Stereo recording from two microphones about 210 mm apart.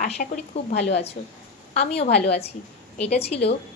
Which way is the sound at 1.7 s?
30° left (ahead or behind).